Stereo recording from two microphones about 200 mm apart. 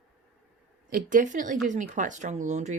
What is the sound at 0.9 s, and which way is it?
Speech, 40° right (ahead or behind).